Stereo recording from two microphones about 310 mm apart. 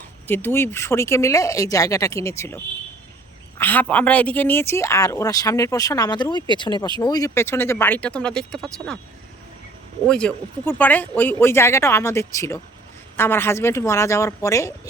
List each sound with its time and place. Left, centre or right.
0.3 s speech: centre
3.6 s speech: centre
10.1 s speech: centre